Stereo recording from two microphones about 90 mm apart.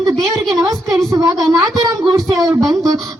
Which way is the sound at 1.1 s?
40° right (ahead or behind).